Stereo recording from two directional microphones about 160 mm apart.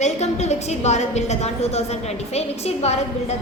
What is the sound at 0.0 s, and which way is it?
A woman's voice, 45° left (ahead or behind).